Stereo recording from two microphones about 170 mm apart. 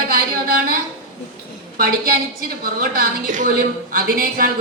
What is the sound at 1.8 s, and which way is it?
A woman's voice, 55° right (ahead or behind).